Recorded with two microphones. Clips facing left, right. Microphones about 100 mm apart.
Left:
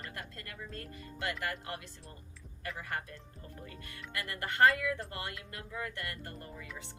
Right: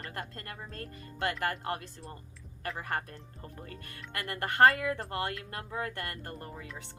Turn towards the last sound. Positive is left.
turn(degrees=-45)  # may be behind; listen again after turning